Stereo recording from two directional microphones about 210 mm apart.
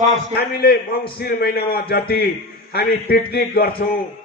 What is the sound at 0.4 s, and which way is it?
A man's voice, 45° left (ahead or behind).